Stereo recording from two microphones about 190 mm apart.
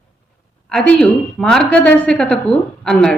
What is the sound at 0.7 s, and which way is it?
A woman's voice, 5° left (ahead or behind).